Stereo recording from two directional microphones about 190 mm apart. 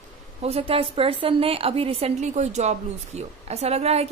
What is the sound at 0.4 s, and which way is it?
A woman's voice, 30° right (ahead or behind).